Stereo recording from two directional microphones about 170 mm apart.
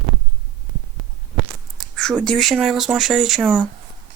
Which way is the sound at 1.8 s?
5° left (ahead or behind).